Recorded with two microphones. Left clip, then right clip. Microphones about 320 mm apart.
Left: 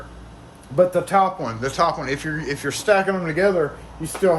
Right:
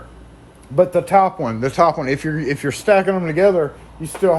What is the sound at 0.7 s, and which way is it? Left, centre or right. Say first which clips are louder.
Speech: right 3 dB; centre.